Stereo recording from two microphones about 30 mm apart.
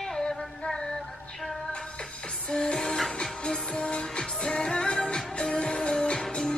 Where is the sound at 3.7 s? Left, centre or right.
Left.